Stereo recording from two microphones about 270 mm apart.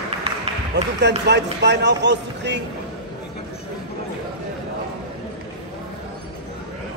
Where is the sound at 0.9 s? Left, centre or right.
Right.